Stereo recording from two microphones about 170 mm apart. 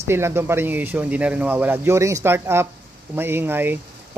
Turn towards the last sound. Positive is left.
turn(degrees=-10)  # may be behind; listen again after turning